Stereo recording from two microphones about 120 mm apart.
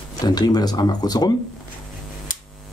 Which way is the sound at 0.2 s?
35° left (ahead or behind).